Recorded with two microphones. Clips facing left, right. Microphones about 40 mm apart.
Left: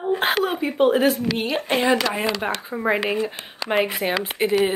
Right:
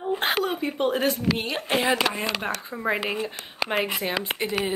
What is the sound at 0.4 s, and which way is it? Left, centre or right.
A woman's voice, centre.